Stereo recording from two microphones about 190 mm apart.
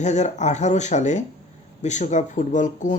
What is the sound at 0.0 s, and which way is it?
Speech, 40° left (ahead or behind).